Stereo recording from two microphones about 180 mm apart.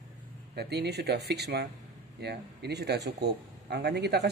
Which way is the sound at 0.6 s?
65° right (ahead or behind).